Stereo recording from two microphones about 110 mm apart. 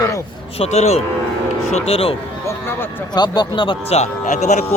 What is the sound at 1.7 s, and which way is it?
Speech, 65° left (ahead or behind).